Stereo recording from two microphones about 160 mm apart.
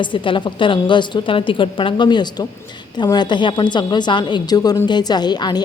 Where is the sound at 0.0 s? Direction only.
30° left (ahead or behind).